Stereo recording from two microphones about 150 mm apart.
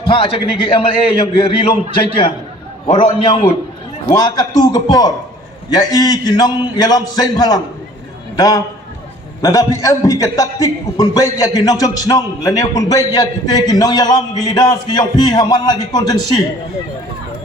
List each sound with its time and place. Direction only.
0.1 s a man's voice: 35° left (ahead or behind)
4.1 s a man's voice: 25° left (ahead or behind)